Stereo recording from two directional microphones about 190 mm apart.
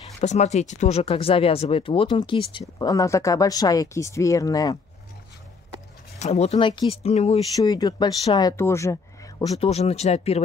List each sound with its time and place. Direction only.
0.2 s speech: 35° left (ahead or behind); by 4.7 s 20° left (ahead or behind)
6.1 s speech: 35° left (ahead or behind)
7.5 s speech: 20° left (ahead or behind)
9.6 s speech: 35° left (ahead or behind)